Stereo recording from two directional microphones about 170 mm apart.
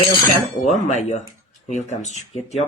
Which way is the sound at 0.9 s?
40° left (ahead or behind).